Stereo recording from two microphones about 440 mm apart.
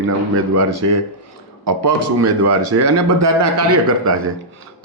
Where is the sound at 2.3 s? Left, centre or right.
Right.